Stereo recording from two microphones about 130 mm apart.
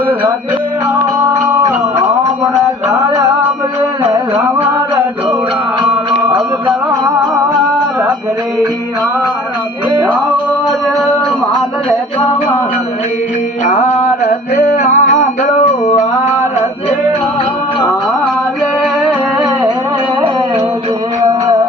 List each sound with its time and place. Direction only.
4.0 s music: 20° right (ahead or behind)
14.5 s music: 65° left (ahead or behind)